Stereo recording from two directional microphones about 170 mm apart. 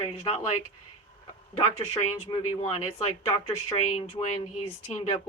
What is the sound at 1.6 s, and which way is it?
Speech, 35° left (ahead or behind).